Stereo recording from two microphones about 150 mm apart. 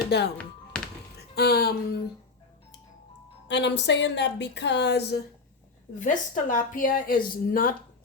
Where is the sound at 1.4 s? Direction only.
90° left.